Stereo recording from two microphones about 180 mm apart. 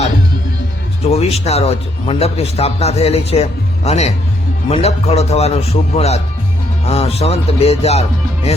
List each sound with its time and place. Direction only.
1.1 s a man's voice: 35° left (ahead or behind)